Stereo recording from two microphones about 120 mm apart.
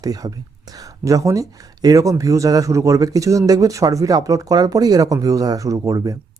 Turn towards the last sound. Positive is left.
turn(degrees=-30)  # may be behind; listen again after turning